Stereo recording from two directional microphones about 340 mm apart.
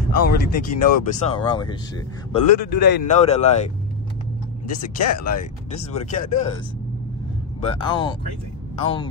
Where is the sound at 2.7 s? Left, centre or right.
Left.